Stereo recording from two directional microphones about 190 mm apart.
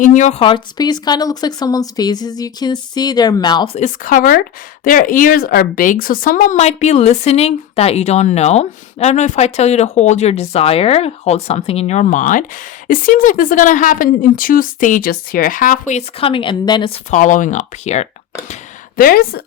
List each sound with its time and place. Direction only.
0.0 s speech: 40° left (ahead or behind); by 3.8 s 25° left (ahead or behind)
3.8 s speech: 45° left (ahead or behind)
18.9 s speech: 50° left (ahead or behind)